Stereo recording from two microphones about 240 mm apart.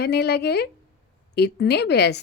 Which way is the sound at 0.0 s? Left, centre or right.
Left.